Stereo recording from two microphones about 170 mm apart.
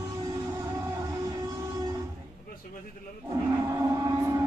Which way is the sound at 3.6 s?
15° right (ahead or behind).